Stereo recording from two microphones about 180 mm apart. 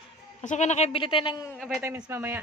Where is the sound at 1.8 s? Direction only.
15° right (ahead or behind).